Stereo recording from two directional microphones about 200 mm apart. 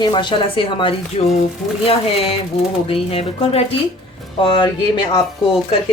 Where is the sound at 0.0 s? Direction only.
25° left (ahead or behind).